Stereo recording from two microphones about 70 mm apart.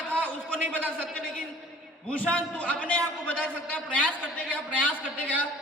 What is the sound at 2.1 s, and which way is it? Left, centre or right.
A man's voice, centre.